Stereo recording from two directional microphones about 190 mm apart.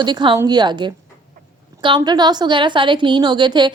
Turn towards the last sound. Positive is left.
turn(degrees=-25)  # may be behind; listen again after turning